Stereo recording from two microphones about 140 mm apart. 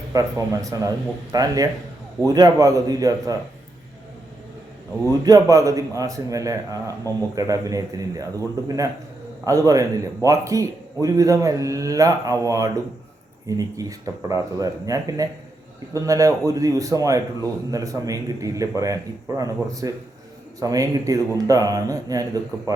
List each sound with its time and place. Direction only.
0.1 s a man's voice: 25° right (ahead or behind)
5.0 s a man's voice: 25° right (ahead or behind)